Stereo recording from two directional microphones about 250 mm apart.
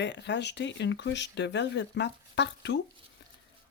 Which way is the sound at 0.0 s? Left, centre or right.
Left.